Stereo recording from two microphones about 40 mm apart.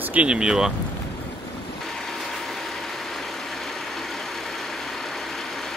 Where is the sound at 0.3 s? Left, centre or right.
Centre.